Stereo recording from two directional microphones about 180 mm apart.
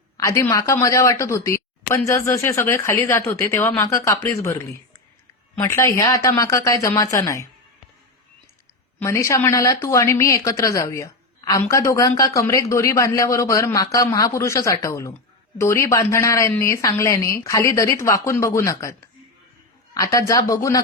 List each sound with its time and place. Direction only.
0.2 s a woman's voice: 15° left (ahead or behind)
9.0 s a woman's voice: 15° left (ahead or behind)